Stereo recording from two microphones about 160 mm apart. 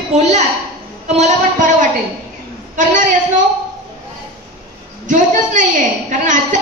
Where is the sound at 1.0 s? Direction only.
45° right (ahead or behind).